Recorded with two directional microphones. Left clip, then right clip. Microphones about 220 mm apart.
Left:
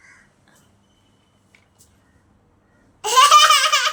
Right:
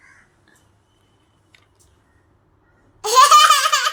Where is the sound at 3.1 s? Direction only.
20° right (ahead or behind).